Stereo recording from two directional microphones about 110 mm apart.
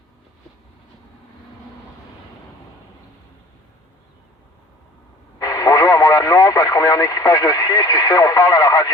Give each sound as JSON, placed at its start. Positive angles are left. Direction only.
{"t": 5.4, "sound": "speech", "side_deg": 35}